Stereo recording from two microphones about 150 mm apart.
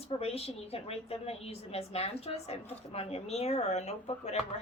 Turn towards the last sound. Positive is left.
turn(degrees=45)  # may be behind; listen again after turning